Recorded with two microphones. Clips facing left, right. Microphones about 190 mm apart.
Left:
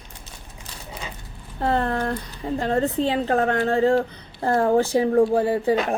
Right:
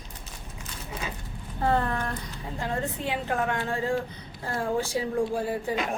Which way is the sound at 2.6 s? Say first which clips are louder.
Left 8 dB; 80° left.